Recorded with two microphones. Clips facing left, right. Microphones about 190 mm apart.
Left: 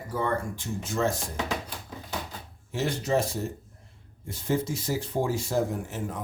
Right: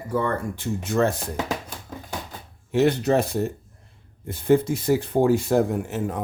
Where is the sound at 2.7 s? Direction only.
65° right (ahead or behind).